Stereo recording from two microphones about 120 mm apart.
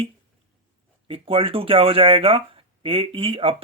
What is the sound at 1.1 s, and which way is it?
Speech, 50° right (ahead or behind).